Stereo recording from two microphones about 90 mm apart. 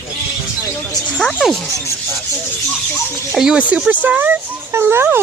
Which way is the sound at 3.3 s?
5° right (ahead or behind).